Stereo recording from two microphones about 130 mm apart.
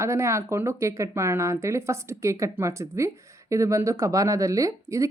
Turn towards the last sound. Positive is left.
turn(degrees=-25)  # may be behind; listen again after turning